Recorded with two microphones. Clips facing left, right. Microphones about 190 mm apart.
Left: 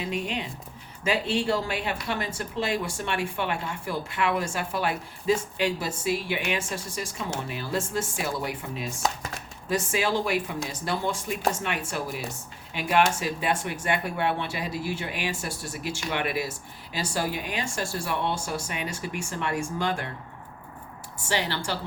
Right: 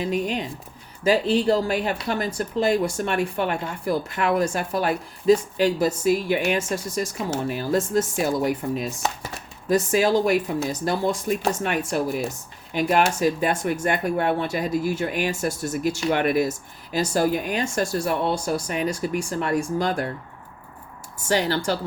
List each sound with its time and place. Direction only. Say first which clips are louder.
0.0 s speech: right 6 dB; 40° right (ahead or behind)
9.0 s speech: right 1 dB; 5° right (ahead or behind)
9.6 s speech: right 7 dB; 40° right (ahead or behind)
21.2 s speech: right 7 dB; 40° right (ahead or behind)